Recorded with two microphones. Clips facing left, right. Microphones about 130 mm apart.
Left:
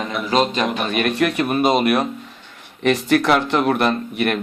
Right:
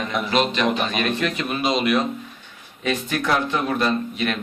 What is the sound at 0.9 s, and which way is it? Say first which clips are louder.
A man's voice: left 4 dB; 60° left (ahead or behind).